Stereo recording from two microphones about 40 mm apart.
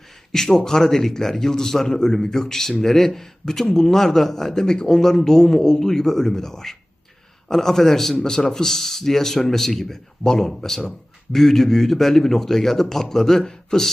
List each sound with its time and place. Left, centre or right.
0.3 s a man's voice: centre